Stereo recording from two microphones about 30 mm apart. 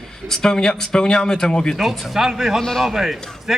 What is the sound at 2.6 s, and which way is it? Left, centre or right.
Speech, centre.